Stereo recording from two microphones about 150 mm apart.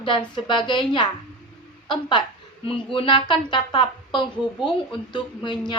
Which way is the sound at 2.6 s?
35° left (ahead or behind).